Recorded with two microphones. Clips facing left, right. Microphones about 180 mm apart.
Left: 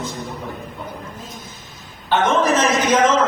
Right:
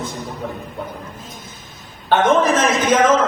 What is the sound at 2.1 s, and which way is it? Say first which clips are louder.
A man's voice: right 2 dB; 55° right (ahead or behind).